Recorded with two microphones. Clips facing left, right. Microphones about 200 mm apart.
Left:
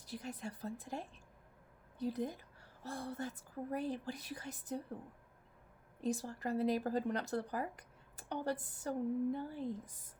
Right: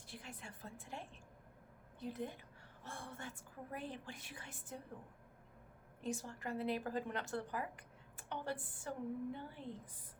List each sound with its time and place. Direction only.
0.0 s speech: 40° left (ahead or behind)
6.0 s speech: 35° left (ahead or behind)